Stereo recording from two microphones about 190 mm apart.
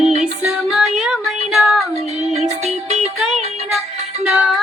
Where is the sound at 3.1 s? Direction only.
Centre (ahead or behind).